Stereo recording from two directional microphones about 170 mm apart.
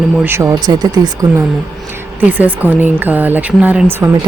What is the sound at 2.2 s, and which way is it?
Speech, 10° right (ahead or behind).